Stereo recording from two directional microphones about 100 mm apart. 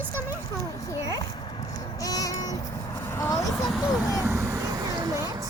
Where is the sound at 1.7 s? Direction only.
35° left (ahead or behind).